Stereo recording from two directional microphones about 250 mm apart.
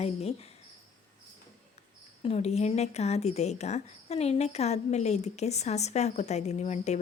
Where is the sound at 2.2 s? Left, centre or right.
Left.